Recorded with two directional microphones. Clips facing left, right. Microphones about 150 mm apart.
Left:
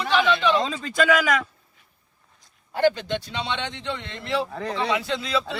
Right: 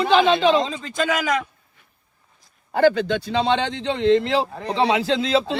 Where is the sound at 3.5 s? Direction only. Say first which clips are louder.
Right 8 dB; 90° right.